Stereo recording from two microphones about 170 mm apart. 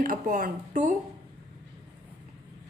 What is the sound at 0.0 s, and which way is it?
Speech, 55° right (ahead or behind).